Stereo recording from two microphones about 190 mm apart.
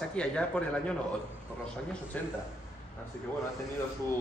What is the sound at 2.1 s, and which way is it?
Speech, 10° left (ahead or behind).